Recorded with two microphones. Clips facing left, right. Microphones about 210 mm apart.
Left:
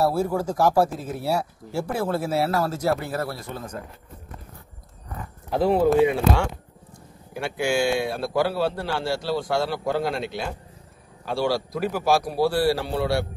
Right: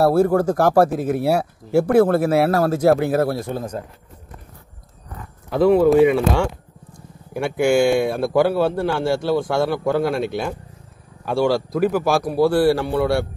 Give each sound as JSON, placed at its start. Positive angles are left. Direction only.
{"t": 0.0, "sound": "speech", "side_deg": -60}
{"t": 5.5, "sound": "speech", "side_deg": -60}
{"t": 7.3, "sound": "speech", "side_deg": -55}